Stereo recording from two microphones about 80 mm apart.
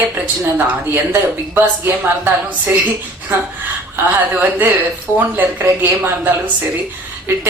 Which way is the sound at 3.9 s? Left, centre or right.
Right.